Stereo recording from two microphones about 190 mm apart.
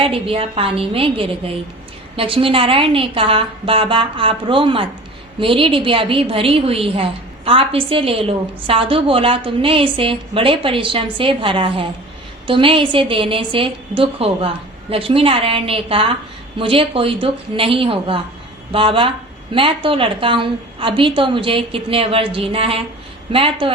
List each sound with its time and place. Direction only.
0.0 s a woman's voice: 30° right (ahead or behind)